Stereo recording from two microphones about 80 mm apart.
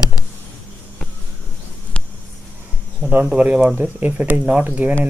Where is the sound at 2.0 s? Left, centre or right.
Centre.